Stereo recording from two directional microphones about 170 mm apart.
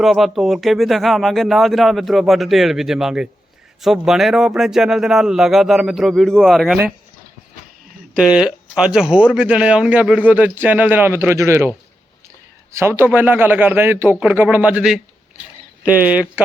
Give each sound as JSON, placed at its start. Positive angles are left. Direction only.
{"t": 0.0, "sound": "speech", "side_deg": 0}
{"t": 8.1, "sound": "speech", "side_deg": -5}
{"t": 12.7, "sound": "speech", "side_deg": -15}